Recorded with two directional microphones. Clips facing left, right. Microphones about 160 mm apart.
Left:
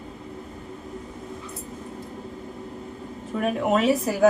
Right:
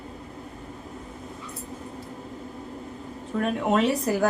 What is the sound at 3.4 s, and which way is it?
Speech, 5° left (ahead or behind).